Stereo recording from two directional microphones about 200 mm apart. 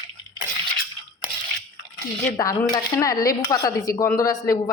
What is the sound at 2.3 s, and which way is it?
A woman's voice, 15° left (ahead or behind).